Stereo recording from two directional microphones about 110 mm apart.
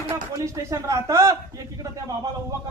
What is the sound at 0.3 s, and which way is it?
Speech, 30° right (ahead or behind).